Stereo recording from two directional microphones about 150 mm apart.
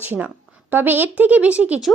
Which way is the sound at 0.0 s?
15° right (ahead or behind).